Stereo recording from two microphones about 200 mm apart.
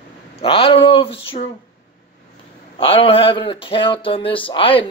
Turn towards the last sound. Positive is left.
turn(degrees=25)  # may be behind; listen again after turning